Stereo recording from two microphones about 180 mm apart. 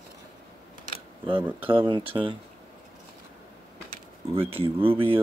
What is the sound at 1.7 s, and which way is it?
Speech, 30° right (ahead or behind).